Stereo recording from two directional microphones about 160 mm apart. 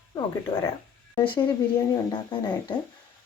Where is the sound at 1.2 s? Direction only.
30° left (ahead or behind).